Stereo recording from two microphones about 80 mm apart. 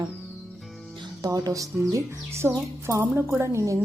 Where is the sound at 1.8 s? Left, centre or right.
Right.